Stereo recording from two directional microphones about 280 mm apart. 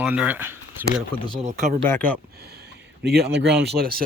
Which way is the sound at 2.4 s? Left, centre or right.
Right.